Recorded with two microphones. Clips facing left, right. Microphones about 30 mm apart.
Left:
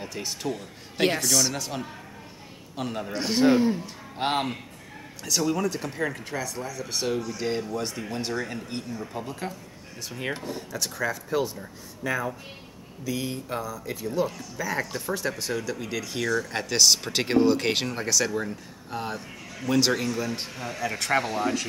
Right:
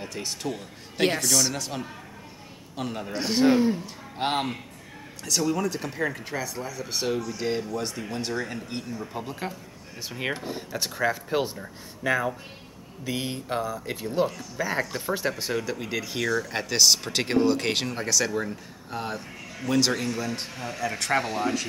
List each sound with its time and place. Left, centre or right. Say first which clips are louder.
0.0 s speech: even; centre; by 12.4 s right
13.0 s speech: even; right
14.8 s speech: right 1 dB; centre